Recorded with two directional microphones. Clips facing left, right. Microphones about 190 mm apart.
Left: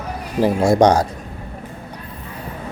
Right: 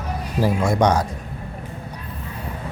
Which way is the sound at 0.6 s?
80° left.